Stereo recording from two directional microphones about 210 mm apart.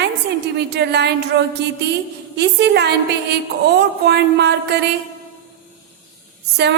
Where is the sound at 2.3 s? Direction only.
50° right (ahead or behind).